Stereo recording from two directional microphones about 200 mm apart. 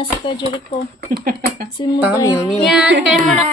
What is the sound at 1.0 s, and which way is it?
Speech, 50° right (ahead or behind).